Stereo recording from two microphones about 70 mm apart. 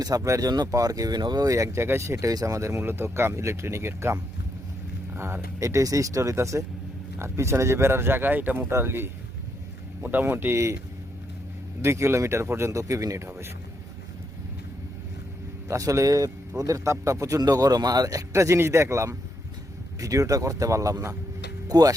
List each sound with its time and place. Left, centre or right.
0.2 s speech: right
0.7 s speech: right
1.5 s speech: right
2.8 s speech: right
5.5 s speech: right
11.8 s speech: right
15.7 s speech: right
21.7 s speech: right